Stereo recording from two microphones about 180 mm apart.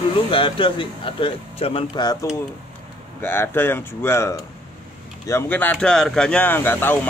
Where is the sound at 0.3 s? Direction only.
30° left (ahead or behind).